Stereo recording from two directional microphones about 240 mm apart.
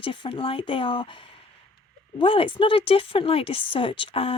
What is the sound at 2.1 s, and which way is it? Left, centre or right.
Speech, left.